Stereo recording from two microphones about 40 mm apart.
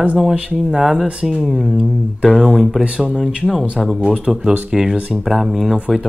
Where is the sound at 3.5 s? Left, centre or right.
Centre.